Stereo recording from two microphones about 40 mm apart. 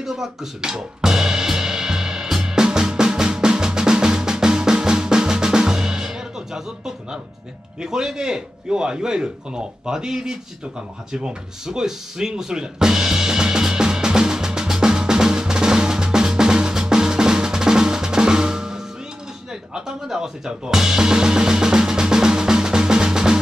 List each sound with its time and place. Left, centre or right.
0.0 s music: centre
7.8 s a man's voice: centre
11.1 s music: centre
19.7 s drum: centre